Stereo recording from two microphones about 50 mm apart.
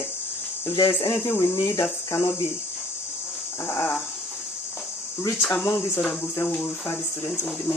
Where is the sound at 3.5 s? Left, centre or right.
Left.